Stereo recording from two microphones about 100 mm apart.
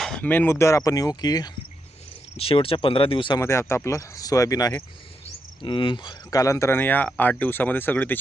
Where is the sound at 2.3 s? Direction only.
70° left (ahead or behind).